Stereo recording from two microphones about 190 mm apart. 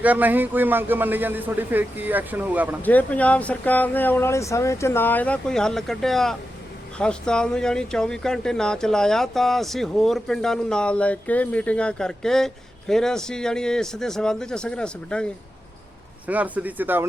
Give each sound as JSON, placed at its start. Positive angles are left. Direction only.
{"t": 0.0, "sound": "a man's voice", "side_deg": -10}
{"t": 2.8, "sound": "speech", "side_deg": 10}
{"t": 16.2, "sound": "a man's voice", "side_deg": -10}